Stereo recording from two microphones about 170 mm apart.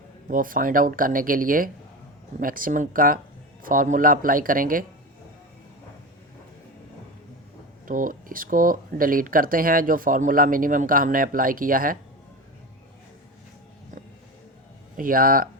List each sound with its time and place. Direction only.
0.3 s speech: 55° right (ahead or behind)
7.9 s speech: 55° right (ahead or behind)
14.9 s speech: 55° right (ahead or behind)